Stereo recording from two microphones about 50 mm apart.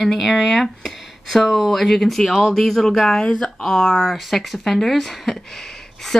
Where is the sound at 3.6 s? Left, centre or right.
Centre.